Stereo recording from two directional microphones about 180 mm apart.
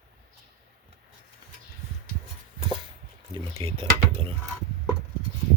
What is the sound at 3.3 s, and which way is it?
Speech, 30° right (ahead or behind).